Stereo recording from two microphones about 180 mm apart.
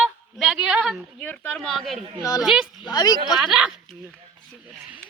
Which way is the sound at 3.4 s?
5° right (ahead or behind).